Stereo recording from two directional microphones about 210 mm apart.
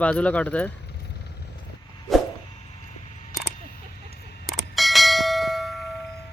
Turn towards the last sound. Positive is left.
turn(degrees=0)  # may be behind; listen again after turning